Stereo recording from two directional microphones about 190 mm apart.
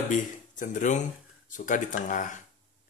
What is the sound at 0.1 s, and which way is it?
Speech, 40° left (ahead or behind).